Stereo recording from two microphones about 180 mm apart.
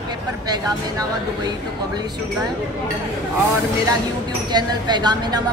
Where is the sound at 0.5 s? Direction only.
20° right (ahead or behind).